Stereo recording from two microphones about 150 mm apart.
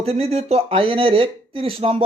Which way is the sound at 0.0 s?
40° right (ahead or behind).